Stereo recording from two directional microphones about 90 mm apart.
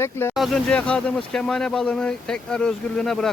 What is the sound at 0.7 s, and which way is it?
Speech, 10° left (ahead or behind).